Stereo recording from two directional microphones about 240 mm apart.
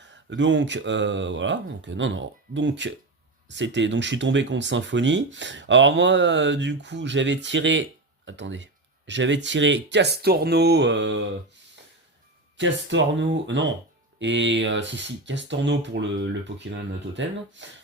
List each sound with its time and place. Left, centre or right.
0.1 s speech: right
12.5 s speech: right